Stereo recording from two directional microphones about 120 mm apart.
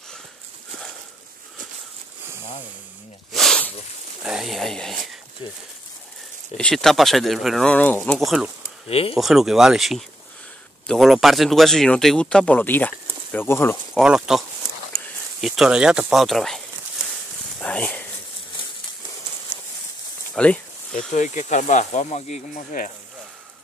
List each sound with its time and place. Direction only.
3.3 s snake: 5° left (ahead or behind)
4.2 s speech: 5° right (ahead or behind)
6.5 s speech: 5° left (ahead or behind)
7.7 s speech: 10° left (ahead or behind)
8.2 s speech: centre (ahead or behind)
8.8 s speech: 55° left (ahead or behind)
9.1 s speech: centre (ahead or behind); by 13.7 s 20° left (ahead or behind)
13.9 s speech: 5° right (ahead or behind)
15.4 s speech: 5° right (ahead or behind)
17.6 s a sound: 10° left (ahead or behind)
20.4 s speech: 5° left (ahead or behind)
21.1 s speech: 90° left